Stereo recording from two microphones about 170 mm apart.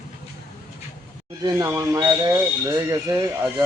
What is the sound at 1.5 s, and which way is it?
Speech, 15° right (ahead or behind).